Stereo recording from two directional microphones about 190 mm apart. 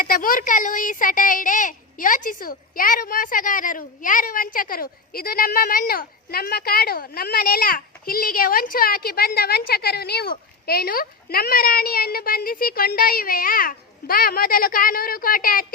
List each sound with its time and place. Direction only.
0.0 s speech: 50° left (ahead or behind)